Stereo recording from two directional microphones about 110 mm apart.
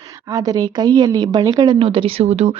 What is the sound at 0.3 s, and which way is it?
Speech, 35° right (ahead or behind).